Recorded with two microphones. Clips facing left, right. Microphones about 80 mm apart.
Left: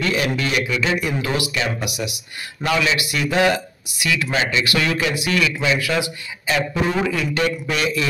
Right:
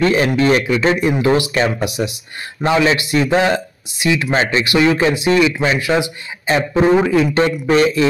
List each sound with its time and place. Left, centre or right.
0.0 s speech: right
4.6 s speech: right